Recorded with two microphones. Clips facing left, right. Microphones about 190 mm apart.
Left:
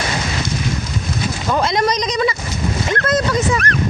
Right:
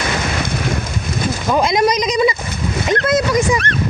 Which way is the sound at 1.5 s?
10° right (ahead or behind).